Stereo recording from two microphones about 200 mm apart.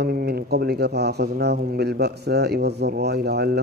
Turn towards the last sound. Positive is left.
turn(degrees=-55)  # may be behind; listen again after turning